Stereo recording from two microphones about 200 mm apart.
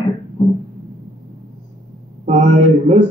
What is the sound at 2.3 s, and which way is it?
Speech, 35° right (ahead or behind).